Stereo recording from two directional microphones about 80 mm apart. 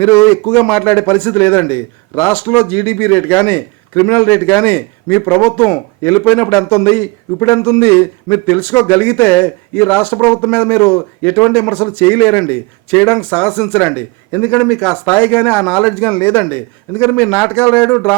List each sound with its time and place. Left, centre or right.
0.0 s a man's voice: left
0.4 s a man's voice: centre
0.8 s a man's voice: left
6.0 s speech: left
6.2 s a man's voice: left
6.9 s a man's voice: left; by 13.7 s centre
13.7 s a man's voice: left
14.6 s a man's voice: centre
15.0 s a man's voice: left